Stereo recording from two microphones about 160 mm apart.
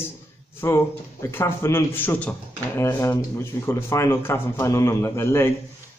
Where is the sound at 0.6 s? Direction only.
15° left (ahead or behind).